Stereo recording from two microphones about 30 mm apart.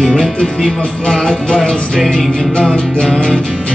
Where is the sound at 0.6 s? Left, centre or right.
Centre.